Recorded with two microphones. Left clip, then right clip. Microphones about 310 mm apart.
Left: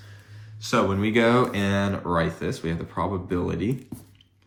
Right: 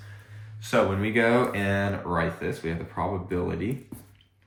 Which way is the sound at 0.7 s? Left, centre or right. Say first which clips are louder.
Left 1 dB; left.